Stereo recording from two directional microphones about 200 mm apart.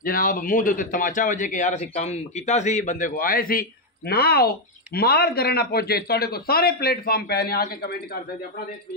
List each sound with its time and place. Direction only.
0.0 s speech: 45° left (ahead or behind)